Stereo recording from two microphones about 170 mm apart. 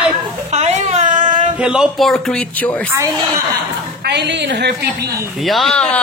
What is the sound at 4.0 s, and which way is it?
A woman's voice, 85° right.